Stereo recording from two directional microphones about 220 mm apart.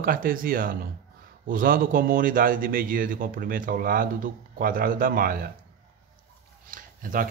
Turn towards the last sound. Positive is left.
turn(degrees=-40)  # may be behind; listen again after turning